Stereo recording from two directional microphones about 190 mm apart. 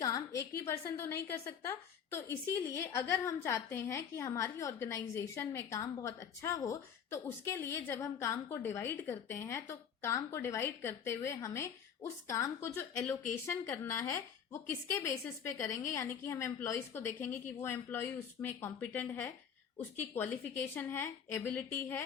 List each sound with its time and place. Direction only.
0.0 s a woman's voice: 15° left (ahead or behind)